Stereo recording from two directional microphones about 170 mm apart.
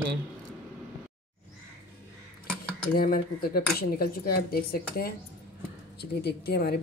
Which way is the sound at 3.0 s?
60° left (ahead or behind).